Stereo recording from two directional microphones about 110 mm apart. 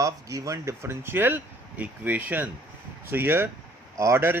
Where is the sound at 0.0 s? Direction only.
30° right (ahead or behind).